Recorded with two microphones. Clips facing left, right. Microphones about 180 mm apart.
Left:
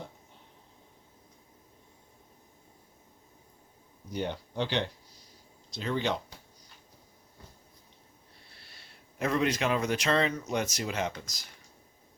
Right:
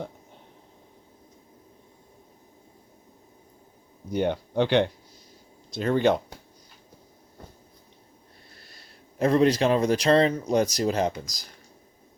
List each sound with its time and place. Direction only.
4.1 s speech: 60° right (ahead or behind)
8.5 s speech: 40° right (ahead or behind)